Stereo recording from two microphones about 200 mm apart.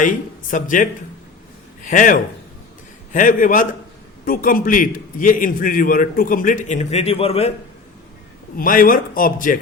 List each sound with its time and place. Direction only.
0.0 s a man's voice: 40° left (ahead or behind)
8.5 s a man's voice: 45° left (ahead or behind)